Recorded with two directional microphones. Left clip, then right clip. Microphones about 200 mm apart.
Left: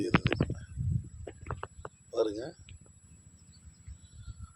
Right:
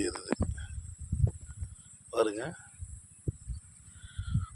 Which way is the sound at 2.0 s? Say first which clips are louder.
Right 2 dB; 5° right (ahead or behind).